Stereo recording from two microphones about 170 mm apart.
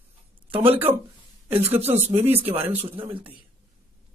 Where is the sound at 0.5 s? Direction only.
30° right (ahead or behind).